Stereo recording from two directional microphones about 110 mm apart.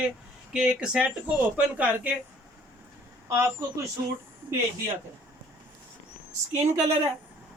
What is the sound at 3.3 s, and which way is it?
Speech, 25° right (ahead or behind).